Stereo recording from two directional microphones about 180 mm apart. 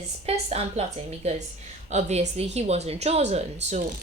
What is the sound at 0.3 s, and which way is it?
A woman's voice, 35° right (ahead or behind).